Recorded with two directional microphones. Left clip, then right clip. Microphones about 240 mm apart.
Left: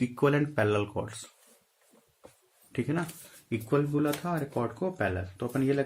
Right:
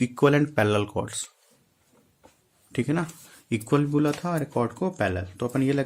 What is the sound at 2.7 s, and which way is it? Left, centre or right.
Speech, right.